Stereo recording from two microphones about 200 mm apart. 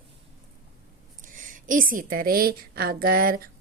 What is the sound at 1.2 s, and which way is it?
A woman's voice, 40° right (ahead or behind).